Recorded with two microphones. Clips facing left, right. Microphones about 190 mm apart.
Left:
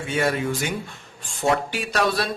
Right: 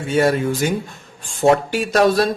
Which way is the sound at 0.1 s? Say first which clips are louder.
Right 6 dB; 40° right (ahead or behind).